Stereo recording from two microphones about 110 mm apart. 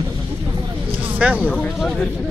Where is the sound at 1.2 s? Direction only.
10° right (ahead or behind).